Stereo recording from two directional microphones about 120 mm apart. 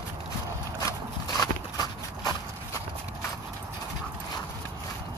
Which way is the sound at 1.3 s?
30° left (ahead or behind).